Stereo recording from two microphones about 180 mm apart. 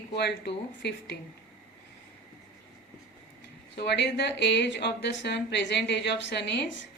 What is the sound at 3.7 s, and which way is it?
Speech, 75° left (ahead or behind).